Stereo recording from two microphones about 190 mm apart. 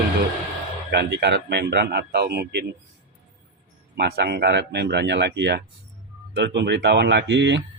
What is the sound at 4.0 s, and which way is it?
Speech, 60° right (ahead or behind).